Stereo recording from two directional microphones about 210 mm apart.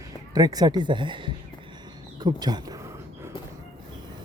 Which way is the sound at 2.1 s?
20° right (ahead or behind).